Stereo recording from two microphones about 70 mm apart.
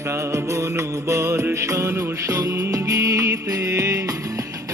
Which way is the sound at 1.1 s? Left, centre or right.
Right.